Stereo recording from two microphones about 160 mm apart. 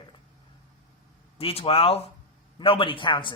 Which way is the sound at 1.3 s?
40° left (ahead or behind).